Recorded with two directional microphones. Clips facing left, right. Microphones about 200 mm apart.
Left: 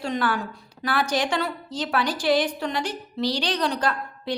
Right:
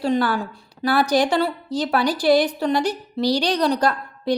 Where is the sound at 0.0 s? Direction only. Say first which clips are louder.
Right 5 dB; 35° right (ahead or behind).